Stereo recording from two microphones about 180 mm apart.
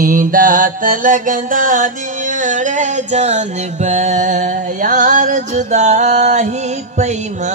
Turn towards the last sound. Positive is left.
turn(degrees=-40)  # may be behind; listen again after turning